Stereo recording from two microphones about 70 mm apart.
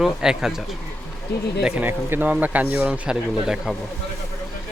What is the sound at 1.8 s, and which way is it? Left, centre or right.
A man's voice, right.